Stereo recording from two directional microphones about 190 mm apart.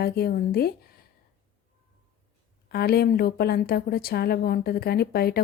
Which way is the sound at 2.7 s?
55° left (ahead or behind).